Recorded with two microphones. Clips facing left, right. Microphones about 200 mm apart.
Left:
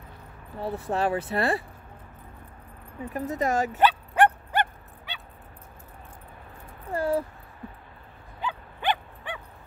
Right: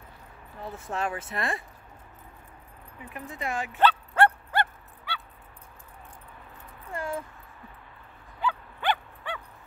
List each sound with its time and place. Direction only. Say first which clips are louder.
0.6 s speech: left 5 dB; 35° left (ahead or behind)
3.0 s speech: left 9 dB; 40° left (ahead or behind)
3.8 s fowl: even; 15° left (ahead or behind)
6.9 s speech: left 8 dB; 35° left (ahead or behind)
8.4 s dog: right 3 dB; 20° left (ahead or behind)